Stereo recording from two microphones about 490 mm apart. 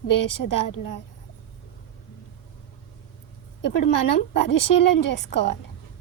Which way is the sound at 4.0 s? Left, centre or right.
Left.